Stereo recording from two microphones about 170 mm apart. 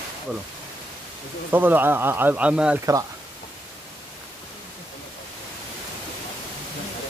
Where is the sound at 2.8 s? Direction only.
20° right (ahead or behind).